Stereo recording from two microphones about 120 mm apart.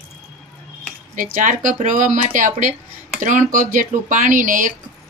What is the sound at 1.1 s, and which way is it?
Speech, 90° right.